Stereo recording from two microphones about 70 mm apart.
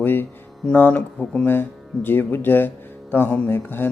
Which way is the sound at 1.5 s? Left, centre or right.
Left.